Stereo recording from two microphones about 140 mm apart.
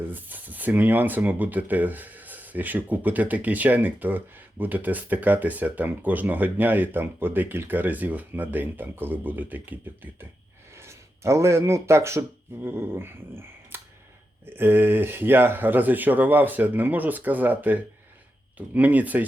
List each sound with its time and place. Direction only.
0.1 s speech: 10° right (ahead or behind)